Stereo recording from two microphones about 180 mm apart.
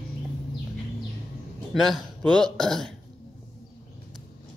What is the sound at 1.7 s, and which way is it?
A man's voice, centre (ahead or behind).